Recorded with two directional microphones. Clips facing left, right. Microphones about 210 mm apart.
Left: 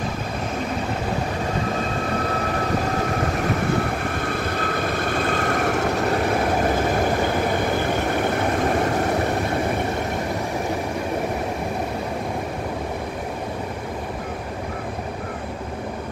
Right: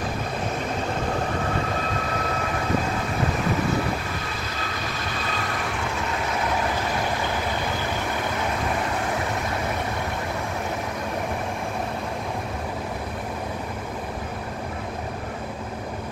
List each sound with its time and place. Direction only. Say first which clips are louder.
4.0 s vehicle: left 7 dB; 55° left (ahead or behind)